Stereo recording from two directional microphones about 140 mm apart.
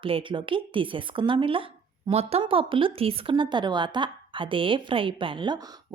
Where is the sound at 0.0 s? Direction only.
35° right (ahead or behind).